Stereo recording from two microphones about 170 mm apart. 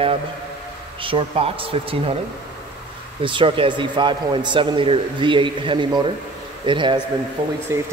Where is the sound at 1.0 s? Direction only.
35° right (ahead or behind).